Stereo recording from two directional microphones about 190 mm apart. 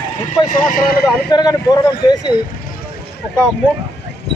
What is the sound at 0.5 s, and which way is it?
Speech, 50° left (ahead or behind).